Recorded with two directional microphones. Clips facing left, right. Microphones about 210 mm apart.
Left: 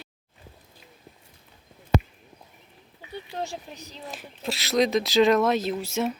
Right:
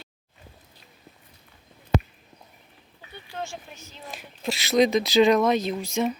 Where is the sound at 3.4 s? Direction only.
35° left (ahead or behind).